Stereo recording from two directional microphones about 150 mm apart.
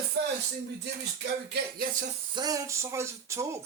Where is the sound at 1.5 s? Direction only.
75° right (ahead or behind).